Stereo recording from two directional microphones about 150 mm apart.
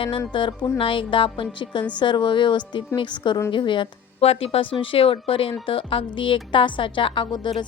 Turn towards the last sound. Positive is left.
turn(degrees=30)  # may be behind; listen again after turning